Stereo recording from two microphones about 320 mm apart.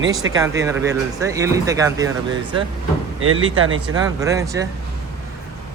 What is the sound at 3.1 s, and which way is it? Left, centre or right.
Speech, right.